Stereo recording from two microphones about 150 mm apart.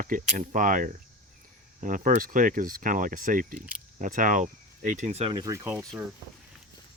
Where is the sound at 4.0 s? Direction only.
60° right (ahead or behind); by 5.3 s 45° right (ahead or behind).